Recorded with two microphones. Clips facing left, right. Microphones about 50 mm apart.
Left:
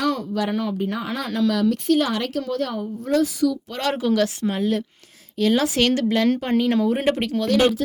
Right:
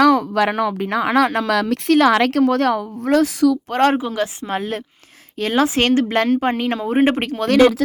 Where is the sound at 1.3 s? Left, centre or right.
Right.